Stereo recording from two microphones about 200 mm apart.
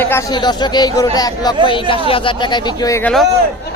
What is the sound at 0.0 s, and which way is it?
Speech, 15° left (ahead or behind).